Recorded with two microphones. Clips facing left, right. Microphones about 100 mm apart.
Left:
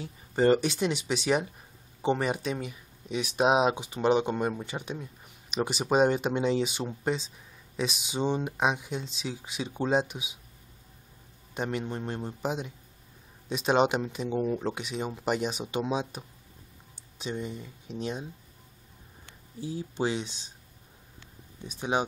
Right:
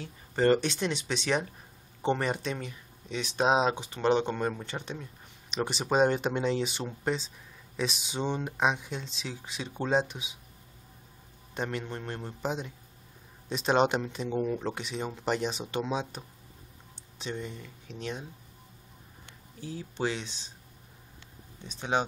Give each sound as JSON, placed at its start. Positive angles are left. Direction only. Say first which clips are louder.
{"t": 0.0, "sound": "speech", "louder": "left 2 dB", "side_deg": 15}
{"t": 11.5, "sound": "speech", "louder": "left 2 dB", "side_deg": 10}
{"t": 19.6, "sound": "speech", "louder": "left 2 dB", "side_deg": 15}
{"t": 21.6, "sound": "speech", "louder": "left 1 dB", "side_deg": 10}